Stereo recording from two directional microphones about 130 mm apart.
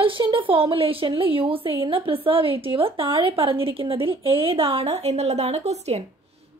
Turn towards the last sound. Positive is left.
turn(degrees=-55)  # may be behind; listen again after turning